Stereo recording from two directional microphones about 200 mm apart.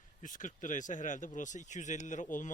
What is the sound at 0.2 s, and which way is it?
Speech, 40° left (ahead or behind).